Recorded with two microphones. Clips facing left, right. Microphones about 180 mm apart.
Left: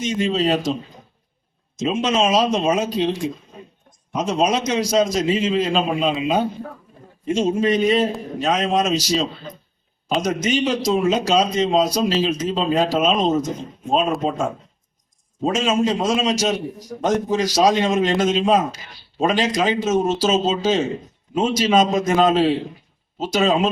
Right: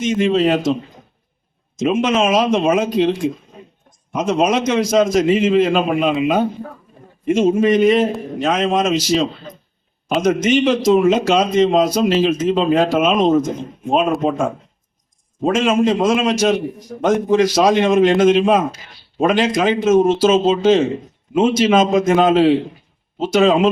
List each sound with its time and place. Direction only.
0.0 s speech: 55° right (ahead or behind)
1.8 s speech: 55° right (ahead or behind)